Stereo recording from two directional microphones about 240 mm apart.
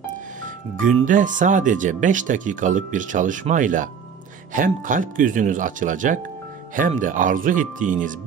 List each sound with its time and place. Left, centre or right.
0.7 s speech: right